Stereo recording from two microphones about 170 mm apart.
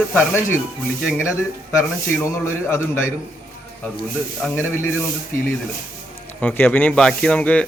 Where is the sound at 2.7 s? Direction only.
15° left (ahead or behind).